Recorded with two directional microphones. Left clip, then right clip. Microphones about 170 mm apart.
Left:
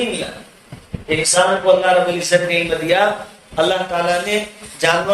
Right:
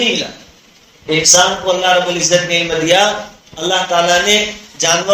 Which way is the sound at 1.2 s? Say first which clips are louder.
Right 3 dB; 15° right (ahead or behind).